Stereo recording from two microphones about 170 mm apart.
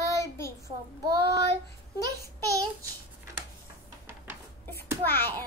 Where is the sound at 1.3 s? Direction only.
25° right (ahead or behind).